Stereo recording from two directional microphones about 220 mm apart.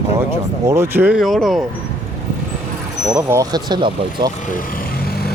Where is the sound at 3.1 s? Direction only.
15° right (ahead or behind).